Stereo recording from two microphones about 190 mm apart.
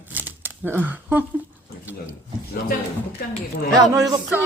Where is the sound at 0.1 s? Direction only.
10° right (ahead or behind).